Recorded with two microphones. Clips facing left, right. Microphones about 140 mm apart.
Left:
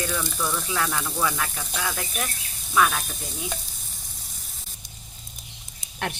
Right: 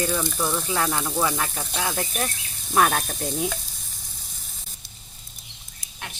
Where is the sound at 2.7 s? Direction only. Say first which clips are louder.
Right 2 dB; 50° right (ahead or behind).